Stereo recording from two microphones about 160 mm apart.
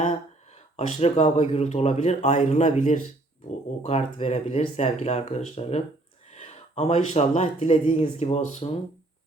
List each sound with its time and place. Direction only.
0.5 s speech: 40° left (ahead or behind)